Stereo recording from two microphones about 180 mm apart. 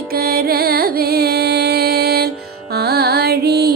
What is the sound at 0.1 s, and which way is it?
Music, 55° right (ahead or behind).